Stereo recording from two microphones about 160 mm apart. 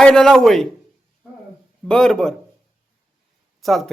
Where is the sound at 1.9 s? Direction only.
5° left (ahead or behind).